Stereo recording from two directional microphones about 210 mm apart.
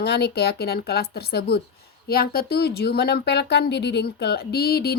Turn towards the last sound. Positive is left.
turn(degrees=50)  # may be behind; listen again after turning